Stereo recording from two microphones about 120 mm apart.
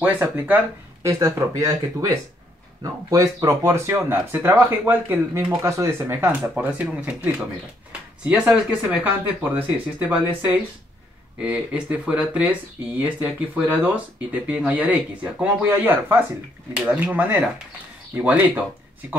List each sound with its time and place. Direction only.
0.0 s speech: 15° right (ahead or behind)
1.0 s speech: 30° right (ahead or behind); by 18.5 s 15° right (ahead or behind)